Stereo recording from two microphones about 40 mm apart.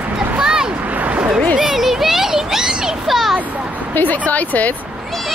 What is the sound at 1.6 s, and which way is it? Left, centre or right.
A child's voice, centre.